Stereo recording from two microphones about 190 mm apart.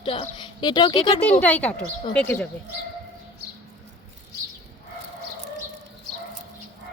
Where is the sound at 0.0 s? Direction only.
30° left (ahead or behind).